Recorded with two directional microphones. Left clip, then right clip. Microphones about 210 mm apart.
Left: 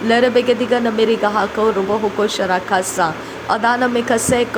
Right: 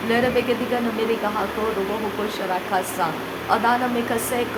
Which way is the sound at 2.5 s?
30° left (ahead or behind).